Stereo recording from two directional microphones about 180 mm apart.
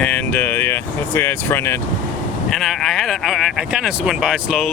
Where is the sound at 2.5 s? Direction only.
Centre (ahead or behind).